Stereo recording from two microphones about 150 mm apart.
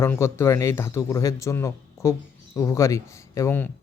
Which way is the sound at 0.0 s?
15° left (ahead or behind).